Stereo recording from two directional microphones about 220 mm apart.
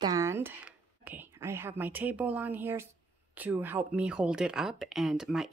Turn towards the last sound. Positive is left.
turn(degrees=0)  # may be behind; listen again after turning